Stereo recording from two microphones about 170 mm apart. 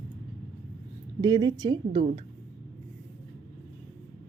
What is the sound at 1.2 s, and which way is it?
A woman's voice, 25° right (ahead or behind).